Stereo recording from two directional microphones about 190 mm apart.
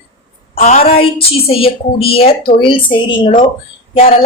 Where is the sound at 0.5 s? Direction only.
35° left (ahead or behind).